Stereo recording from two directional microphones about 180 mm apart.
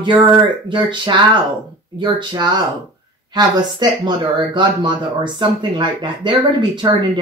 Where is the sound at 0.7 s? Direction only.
25° right (ahead or behind).